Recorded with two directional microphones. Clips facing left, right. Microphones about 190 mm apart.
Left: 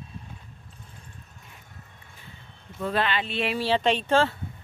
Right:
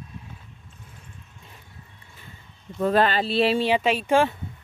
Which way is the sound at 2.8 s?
45° right (ahead or behind).